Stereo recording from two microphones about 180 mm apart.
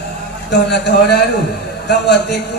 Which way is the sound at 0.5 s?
70° left (ahead or behind).